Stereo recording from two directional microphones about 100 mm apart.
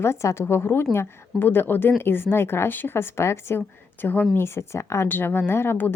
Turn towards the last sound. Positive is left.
turn(degrees=20)  # may be behind; listen again after turning